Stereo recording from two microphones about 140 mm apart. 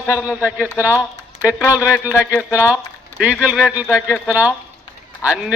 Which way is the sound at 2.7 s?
10° right (ahead or behind).